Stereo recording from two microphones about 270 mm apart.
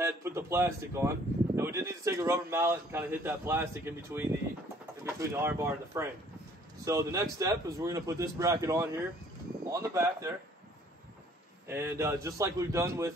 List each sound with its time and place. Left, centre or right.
0.0 s speech: centre
11.6 s speech: centre